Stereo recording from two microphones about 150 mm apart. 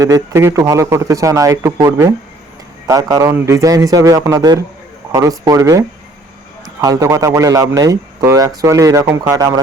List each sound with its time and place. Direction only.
0.0 s speech: 20° right (ahead or behind)
6.8 s speech: 20° right (ahead or behind)